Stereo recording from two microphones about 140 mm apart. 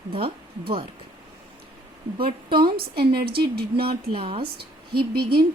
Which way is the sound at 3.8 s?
40° right (ahead or behind).